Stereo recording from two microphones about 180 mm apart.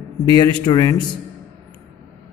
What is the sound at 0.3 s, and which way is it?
Speech, 25° left (ahead or behind).